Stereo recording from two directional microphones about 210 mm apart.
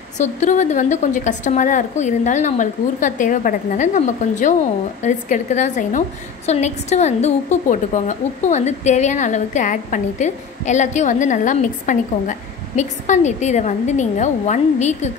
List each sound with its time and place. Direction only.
0.2 s a woman's voice: 35° left (ahead or behind)